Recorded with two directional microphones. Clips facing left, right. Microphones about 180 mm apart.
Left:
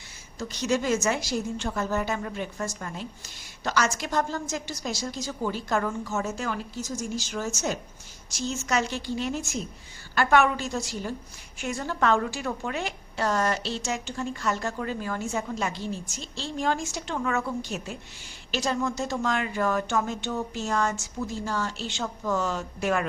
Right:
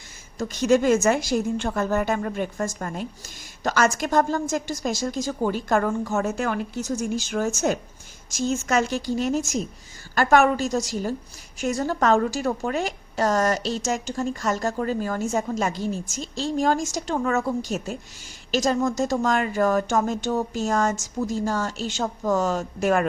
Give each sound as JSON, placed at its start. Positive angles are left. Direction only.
{"t": 0.3, "sound": "a woman's voice", "side_deg": -50}